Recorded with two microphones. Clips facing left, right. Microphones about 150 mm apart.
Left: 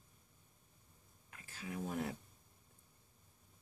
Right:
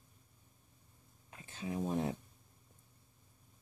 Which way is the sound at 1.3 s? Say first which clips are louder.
Right 6 dB; 25° right (ahead or behind).